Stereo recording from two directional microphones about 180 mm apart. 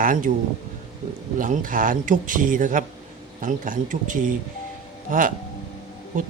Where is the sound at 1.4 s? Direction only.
50° right (ahead or behind).